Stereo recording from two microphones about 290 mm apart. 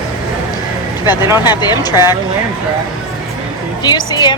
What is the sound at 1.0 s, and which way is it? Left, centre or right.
A woman's voice, centre.